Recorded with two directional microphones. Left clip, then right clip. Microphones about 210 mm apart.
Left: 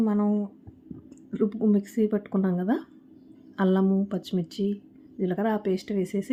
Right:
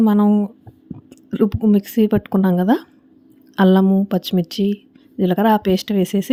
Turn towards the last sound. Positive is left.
turn(degrees=-45)  # may be behind; listen again after turning